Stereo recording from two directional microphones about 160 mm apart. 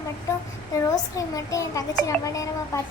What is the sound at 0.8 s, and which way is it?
A child's voice, 20° left (ahead or behind).